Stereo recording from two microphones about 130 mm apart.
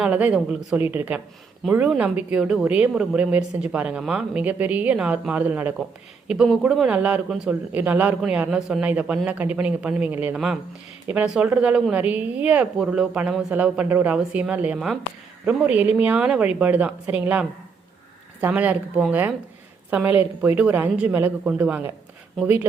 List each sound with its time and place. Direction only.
0.0 s a woman's voice: 10° right (ahead or behind)
6.2 s a woman's voice: 5° right (ahead or behind)